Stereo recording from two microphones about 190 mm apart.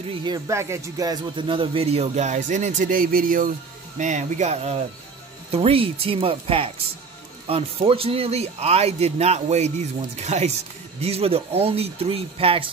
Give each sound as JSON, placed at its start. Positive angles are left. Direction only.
{"t": 0.2, "sound": "speech", "side_deg": -20}